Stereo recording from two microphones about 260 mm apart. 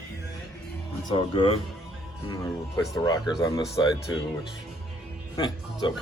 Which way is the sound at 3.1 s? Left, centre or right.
Centre.